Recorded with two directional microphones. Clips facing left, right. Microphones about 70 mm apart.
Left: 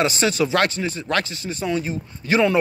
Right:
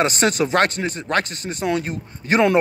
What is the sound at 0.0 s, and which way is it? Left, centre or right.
Speech, right.